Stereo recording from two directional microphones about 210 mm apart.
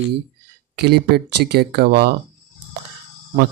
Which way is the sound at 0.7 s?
50° right (ahead or behind).